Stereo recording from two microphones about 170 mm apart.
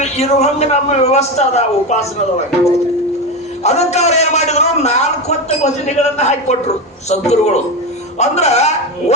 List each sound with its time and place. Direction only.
0.0 s a man's voice: 40° left (ahead or behind)
3.6 s a man's voice: 40° left (ahead or behind)